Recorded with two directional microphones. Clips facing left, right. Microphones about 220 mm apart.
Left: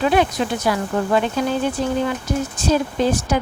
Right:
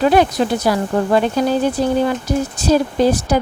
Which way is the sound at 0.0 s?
40° right (ahead or behind).